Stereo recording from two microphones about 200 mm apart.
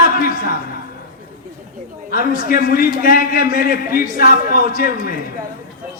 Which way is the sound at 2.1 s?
45° left (ahead or behind).